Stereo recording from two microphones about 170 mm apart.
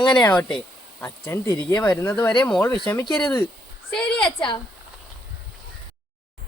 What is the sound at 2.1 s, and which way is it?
Speech, 25° left (ahead or behind).